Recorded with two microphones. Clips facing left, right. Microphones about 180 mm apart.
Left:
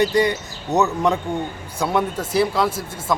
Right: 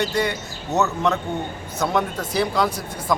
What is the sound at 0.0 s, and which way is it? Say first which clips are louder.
A man's voice: left 5 dB; 15° left (ahead or behind).